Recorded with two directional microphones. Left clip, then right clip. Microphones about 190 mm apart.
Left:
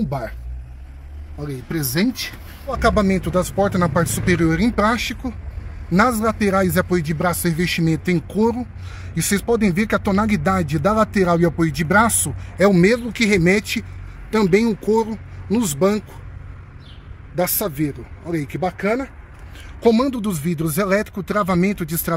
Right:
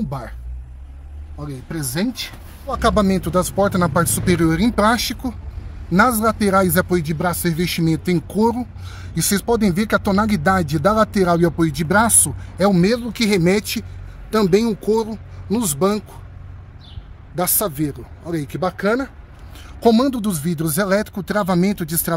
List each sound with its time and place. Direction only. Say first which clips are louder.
1.4 s speech: left 3 dB; 15° left (ahead or behind)
2.7 s speech: even; 10° right (ahead or behind)
5.9 s speech: right 2 dB; 5° right (ahead or behind)
17.4 s speech: even; 10° right (ahead or behind)
18.6 s speech: right 2 dB; 20° right (ahead or behind)